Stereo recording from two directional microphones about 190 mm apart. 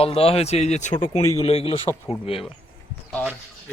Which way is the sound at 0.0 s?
30° left (ahead or behind).